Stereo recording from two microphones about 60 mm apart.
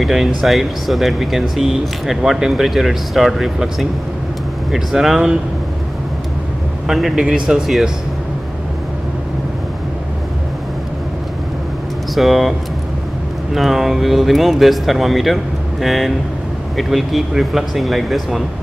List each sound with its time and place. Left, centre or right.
0.0 s speech: centre
4.7 s speech: centre
6.9 s speech: centre
12.2 s speech: centre